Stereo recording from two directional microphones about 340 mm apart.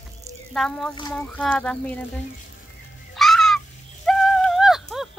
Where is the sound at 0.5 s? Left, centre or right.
Centre.